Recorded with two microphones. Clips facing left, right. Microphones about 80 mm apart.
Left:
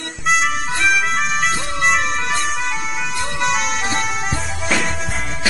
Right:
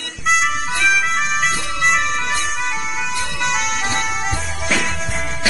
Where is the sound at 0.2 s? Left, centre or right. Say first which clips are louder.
Even; centre.